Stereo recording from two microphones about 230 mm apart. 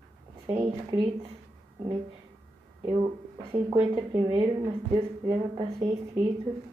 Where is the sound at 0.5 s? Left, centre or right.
Centre.